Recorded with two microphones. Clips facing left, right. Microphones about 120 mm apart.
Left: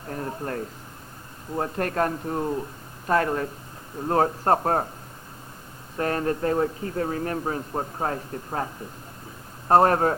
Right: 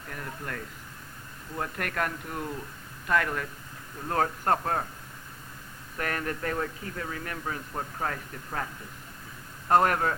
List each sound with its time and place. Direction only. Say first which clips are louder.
0.1 s speech: left 8 dB; 35° left (ahead or behind)
6.0 s speech: left 7 dB; 30° left (ahead or behind)